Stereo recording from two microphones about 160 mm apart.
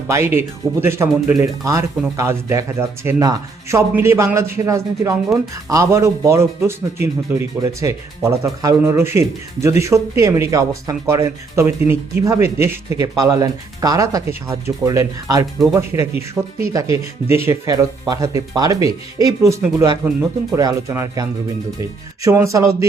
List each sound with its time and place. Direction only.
0.1 s speech: 15° right (ahead or behind)